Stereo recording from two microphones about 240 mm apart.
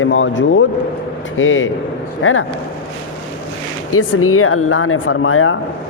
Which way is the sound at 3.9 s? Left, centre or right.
Left.